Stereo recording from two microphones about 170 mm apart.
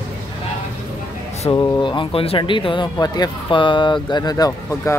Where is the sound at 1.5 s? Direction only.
25° left (ahead or behind).